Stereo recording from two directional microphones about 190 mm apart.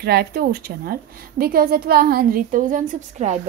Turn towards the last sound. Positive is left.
turn(degrees=-40)  # may be behind; listen again after turning